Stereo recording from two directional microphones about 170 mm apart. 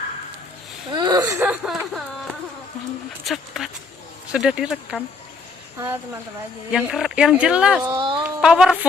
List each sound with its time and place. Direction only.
0.9 s whimper: 25° right (ahead or behind)
1.4 s a sound: centre (ahead or behind)
3.2 s speech: centre (ahead or behind)
6.7 s speech: centre (ahead or behind)
7.9 s a sound: 30° right (ahead or behind)
8.2 s speech: 5° right (ahead or behind)